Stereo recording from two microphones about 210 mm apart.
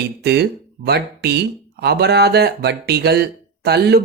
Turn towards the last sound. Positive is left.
turn(degrees=-50)  # may be behind; listen again after turning